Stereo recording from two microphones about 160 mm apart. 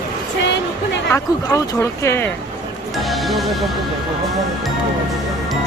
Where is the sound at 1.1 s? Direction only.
20° left (ahead or behind).